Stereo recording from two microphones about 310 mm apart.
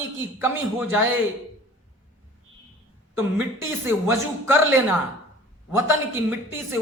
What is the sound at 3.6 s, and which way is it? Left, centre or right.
Speech, centre.